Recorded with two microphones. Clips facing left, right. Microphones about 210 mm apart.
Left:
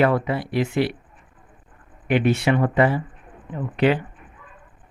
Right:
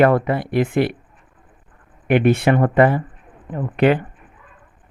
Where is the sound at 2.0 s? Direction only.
55° right (ahead or behind).